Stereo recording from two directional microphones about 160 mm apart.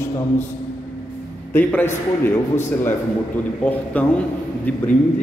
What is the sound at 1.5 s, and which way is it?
A man's voice, 10° left (ahead or behind).